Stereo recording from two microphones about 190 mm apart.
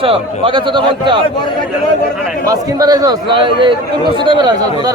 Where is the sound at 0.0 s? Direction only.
30° right (ahead or behind).